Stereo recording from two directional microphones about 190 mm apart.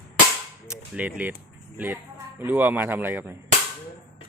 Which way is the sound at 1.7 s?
10° right (ahead or behind).